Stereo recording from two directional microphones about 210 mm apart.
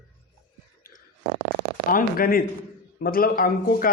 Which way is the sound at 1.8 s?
40° left (ahead or behind).